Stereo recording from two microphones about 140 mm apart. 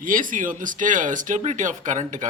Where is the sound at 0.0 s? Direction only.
75° right (ahead or behind).